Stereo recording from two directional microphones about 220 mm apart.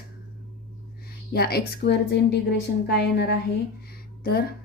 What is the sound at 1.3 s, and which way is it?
Speech, 45° left (ahead or behind).